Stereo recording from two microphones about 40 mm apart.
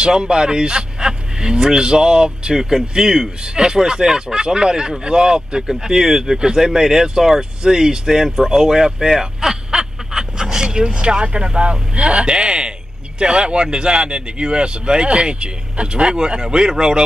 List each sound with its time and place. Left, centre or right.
0.0 s speech: right
9.1 s a sound: centre
10.9 s speech: right